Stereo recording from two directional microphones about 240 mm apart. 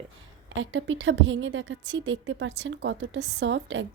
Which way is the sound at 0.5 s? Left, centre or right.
Right.